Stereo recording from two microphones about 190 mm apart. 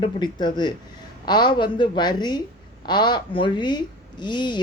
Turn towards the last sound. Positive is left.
turn(degrees=25)  # may be behind; listen again after turning